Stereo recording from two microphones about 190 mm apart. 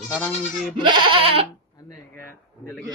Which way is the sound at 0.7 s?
25° right (ahead or behind).